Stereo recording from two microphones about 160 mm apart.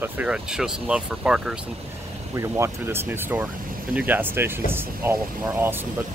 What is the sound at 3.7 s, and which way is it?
Vehicle, 65° right (ahead or behind).